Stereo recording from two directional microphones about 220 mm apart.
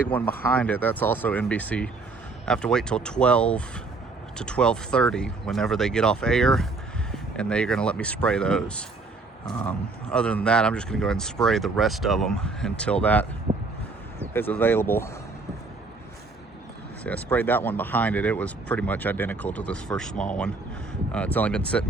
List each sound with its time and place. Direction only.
0.1 s speech: 5° left (ahead or behind)
13.5 s a sound: 35° right (ahead or behind)
14.3 s speech: 10° left (ahead or behind)
17.0 s speech: 5° left (ahead or behind)